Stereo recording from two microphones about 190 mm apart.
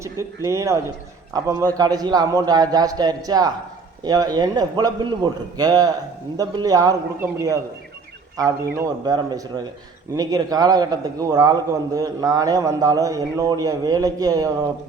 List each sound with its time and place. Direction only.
0.4 s a man's voice: 15° right (ahead or behind)